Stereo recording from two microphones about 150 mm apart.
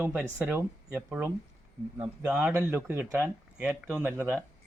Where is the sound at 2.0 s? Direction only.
10° right (ahead or behind).